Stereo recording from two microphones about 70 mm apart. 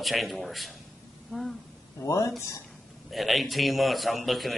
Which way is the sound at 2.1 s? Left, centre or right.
Left.